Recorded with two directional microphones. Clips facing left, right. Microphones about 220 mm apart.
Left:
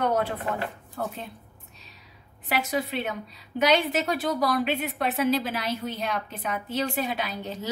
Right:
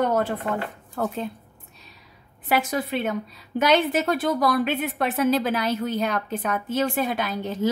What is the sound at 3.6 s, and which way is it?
A woman's voice, 50° right (ahead or behind).